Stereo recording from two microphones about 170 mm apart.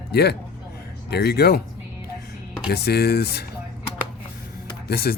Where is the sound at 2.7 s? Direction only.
70° left (ahead or behind).